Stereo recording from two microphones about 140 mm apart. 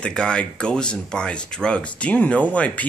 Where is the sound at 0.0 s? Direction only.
5° left (ahead or behind).